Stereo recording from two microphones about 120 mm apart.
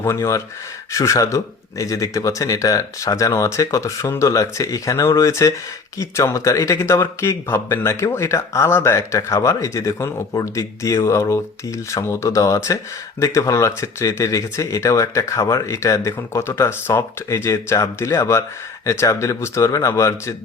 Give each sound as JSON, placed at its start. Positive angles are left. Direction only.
{"t": 0.0, "sound": "speech", "side_deg": 25}